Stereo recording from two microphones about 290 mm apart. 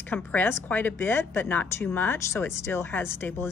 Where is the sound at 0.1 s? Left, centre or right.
Centre.